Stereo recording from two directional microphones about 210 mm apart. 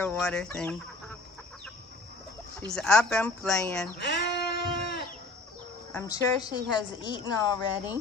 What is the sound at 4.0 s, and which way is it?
Female singing, 55° left (ahead or behind).